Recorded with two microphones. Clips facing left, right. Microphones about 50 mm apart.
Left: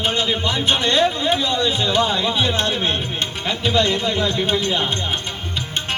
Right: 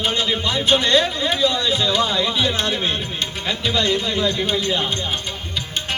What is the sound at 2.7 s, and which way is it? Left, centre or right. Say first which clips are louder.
Speech: left 1 dB; left.